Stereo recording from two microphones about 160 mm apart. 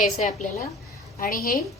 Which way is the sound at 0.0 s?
55° left (ahead or behind).